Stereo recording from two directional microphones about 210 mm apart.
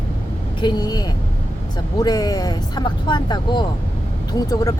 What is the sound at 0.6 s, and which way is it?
Speech, 20° left (ahead or behind).